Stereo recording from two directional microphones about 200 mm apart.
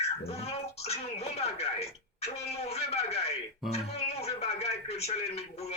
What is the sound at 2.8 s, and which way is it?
Speech, 30° left (ahead or behind).